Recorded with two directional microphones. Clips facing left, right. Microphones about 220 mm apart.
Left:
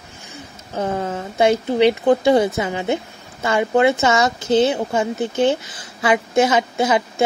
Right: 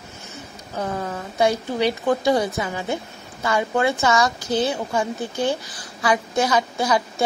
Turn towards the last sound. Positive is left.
turn(degrees=25)  # may be behind; listen again after turning